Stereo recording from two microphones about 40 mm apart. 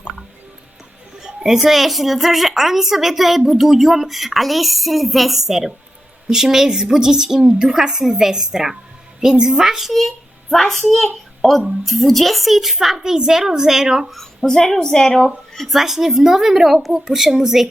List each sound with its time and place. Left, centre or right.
1.2 s a woman's voice: centre
10.5 s a child's voice: centre
14.4 s a woman's voice: centre
15.5 s a woman's voice: centre